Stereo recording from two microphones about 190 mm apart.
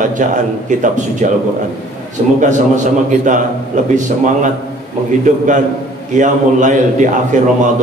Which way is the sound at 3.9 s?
40° right (ahead or behind).